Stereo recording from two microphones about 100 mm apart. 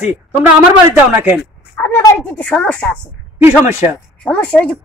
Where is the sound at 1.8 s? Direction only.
15° left (ahead or behind).